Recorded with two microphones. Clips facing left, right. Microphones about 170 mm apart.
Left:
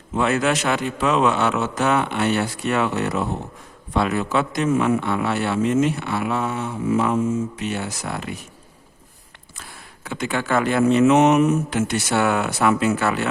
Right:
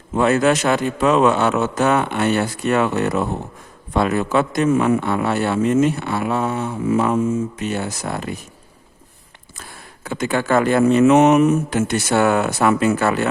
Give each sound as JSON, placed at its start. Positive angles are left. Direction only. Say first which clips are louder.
{"t": 0.1, "sound": "a man's voice", "louder": "right 4 dB", "side_deg": -40}
{"t": 9.6, "sound": "a man's voice", "louder": "right 3 dB", "side_deg": -45}